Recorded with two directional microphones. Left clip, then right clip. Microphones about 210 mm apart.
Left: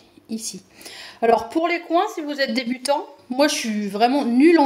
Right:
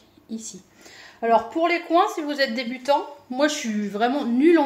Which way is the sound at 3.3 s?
30° left (ahead or behind).